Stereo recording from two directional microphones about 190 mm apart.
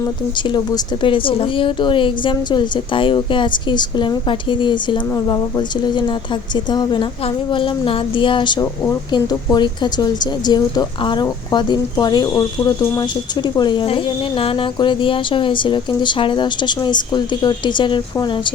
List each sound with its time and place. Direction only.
0.3 s a woman's voice: 25° left (ahead or behind)